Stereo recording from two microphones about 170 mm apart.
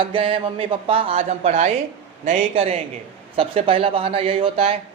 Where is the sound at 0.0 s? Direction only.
30° right (ahead or behind).